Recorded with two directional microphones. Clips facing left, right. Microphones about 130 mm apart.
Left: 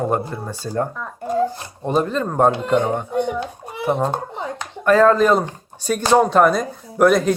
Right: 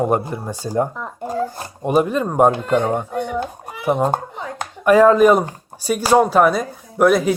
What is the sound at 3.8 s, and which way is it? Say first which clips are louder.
A child's voice: right 2 dB; 10° right (ahead or behind).